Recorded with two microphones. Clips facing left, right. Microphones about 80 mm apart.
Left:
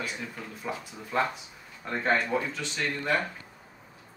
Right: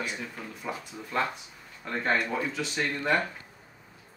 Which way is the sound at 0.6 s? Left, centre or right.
Centre.